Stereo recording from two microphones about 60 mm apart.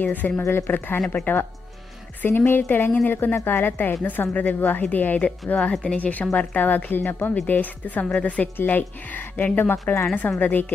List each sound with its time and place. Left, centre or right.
0.0 s a woman's voice: left
0.4 s a woman's voice: left